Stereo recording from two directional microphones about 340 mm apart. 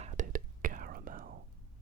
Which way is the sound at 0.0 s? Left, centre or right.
Right.